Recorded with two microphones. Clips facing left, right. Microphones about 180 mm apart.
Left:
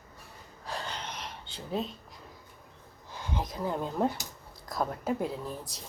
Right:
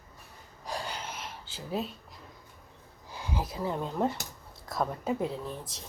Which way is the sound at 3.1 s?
10° right (ahead or behind).